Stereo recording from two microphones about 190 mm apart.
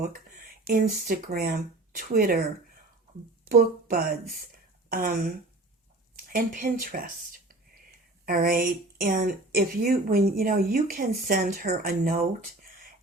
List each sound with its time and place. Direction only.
0.6 s speech: 45° right (ahead or behind)
6.3 s speech: 45° right (ahead or behind)